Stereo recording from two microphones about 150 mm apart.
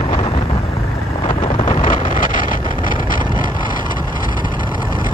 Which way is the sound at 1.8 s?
65° left (ahead or behind).